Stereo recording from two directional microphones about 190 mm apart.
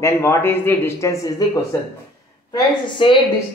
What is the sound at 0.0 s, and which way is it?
A man's voice, 15° left (ahead or behind).